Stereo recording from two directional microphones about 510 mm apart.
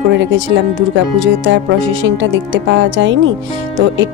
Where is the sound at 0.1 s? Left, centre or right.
Right.